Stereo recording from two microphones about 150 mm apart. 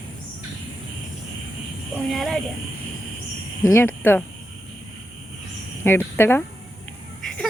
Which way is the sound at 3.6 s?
15° left (ahead or behind).